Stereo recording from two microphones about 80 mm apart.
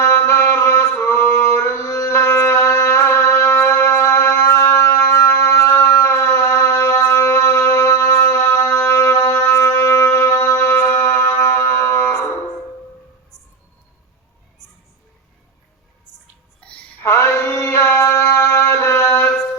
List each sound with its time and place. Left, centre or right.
0.0 s mantra: left
16.6 s music: centre
17.0 s a sound: left